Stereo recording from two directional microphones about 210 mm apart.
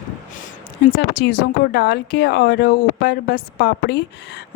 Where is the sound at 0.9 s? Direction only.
50° left (ahead or behind).